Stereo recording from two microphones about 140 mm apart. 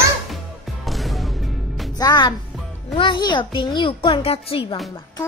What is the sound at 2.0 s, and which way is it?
A child's voice, 30° left (ahead or behind).